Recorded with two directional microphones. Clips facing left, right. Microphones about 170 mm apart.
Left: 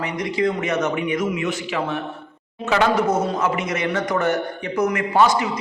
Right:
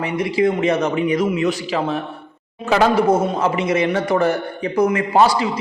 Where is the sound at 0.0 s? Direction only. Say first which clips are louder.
Right 4 dB; 30° right (ahead or behind).